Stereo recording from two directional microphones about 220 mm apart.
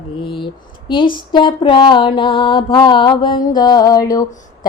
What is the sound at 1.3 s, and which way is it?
Mantra, 20° left (ahead or behind).